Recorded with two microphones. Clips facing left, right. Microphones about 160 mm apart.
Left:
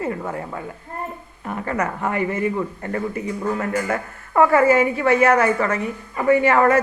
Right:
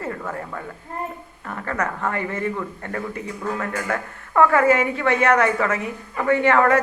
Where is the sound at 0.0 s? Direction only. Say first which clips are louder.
Left 3 dB; 20° left (ahead or behind).